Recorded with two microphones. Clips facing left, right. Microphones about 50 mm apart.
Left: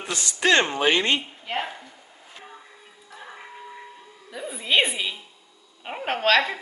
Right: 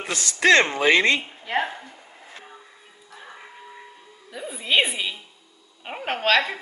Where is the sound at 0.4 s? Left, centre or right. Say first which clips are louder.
Right 3 dB; right.